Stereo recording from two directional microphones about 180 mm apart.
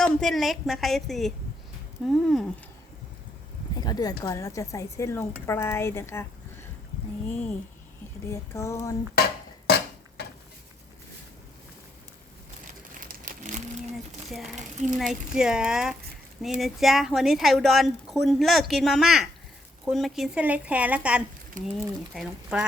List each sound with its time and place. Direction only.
0.0 s a woman's voice: 5° left (ahead or behind)
3.8 s a woman's voice: 20° left (ahead or behind)
9.6 s a sound: 60° left (ahead or behind)
13.0 s crumpling: 50° right (ahead or behind)
14.9 s a woman's voice: centre (ahead or behind)
21.6 s speech: 45° right (ahead or behind)
22.1 s a woman's voice: 5° right (ahead or behind)